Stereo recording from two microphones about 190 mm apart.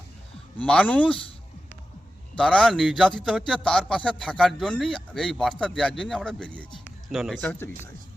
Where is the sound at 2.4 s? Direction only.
5° left (ahead or behind).